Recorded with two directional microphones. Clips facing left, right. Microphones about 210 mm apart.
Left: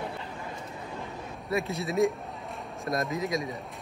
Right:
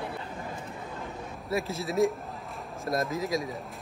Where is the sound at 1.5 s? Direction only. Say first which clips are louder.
Left 1 dB; centre (ahead or behind).